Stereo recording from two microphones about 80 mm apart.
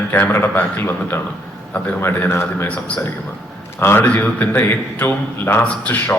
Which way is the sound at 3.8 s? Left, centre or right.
Left.